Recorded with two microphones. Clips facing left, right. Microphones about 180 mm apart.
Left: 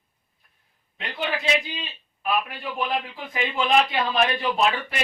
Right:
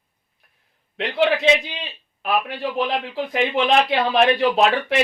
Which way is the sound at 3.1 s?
80° right.